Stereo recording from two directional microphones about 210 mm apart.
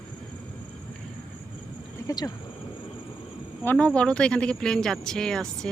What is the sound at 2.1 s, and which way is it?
Speech, 15° left (ahead or behind).